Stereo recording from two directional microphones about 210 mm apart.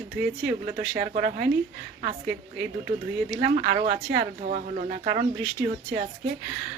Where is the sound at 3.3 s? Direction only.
45° right (ahead or behind).